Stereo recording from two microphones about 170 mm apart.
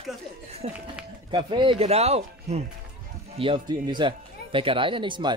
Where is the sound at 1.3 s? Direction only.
30° right (ahead or behind).